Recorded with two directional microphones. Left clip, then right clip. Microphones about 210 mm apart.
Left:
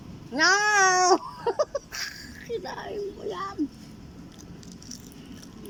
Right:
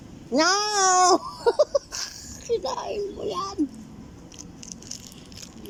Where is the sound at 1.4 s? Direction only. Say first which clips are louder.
Right 6 dB; 20° right (ahead or behind).